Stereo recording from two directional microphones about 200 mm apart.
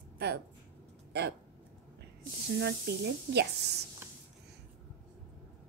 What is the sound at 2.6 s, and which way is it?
Speech, 55° right (ahead or behind).